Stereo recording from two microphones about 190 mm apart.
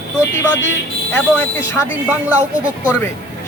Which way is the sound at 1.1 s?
15° left (ahead or behind).